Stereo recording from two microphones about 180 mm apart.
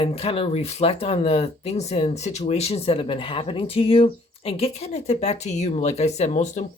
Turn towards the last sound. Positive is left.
turn(degrees=40)  # may be behind; listen again after turning